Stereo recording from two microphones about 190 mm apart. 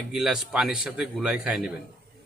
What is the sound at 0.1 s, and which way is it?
A man's voice, centre (ahead or behind).